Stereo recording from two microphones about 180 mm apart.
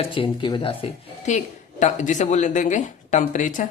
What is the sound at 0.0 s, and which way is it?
Speech, 30° left (ahead or behind).